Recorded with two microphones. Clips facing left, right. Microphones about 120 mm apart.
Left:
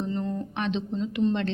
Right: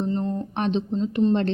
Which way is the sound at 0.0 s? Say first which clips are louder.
Right 4 dB; 35° right (ahead or behind).